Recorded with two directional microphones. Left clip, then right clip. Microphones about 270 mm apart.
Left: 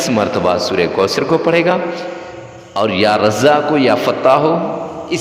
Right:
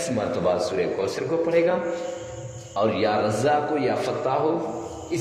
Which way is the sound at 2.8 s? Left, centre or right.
Left.